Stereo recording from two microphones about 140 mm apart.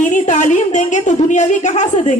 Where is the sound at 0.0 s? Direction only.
60° left (ahead or behind).